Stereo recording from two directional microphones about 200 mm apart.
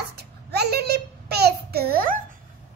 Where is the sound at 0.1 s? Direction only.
55° right (ahead or behind).